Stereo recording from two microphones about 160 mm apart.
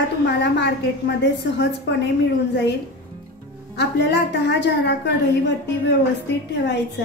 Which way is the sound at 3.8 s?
90° left.